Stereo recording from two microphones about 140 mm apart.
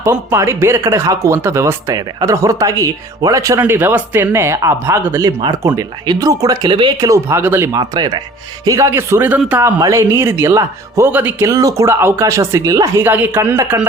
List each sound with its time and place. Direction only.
0.0 s speech: 20° right (ahead or behind)
7.0 s speech: 20° right (ahead or behind)
7.8 s speech: 30° right (ahead or behind)